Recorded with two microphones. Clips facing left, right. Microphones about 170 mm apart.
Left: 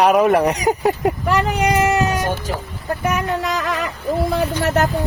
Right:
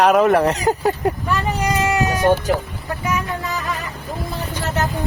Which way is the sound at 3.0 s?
70° left (ahead or behind).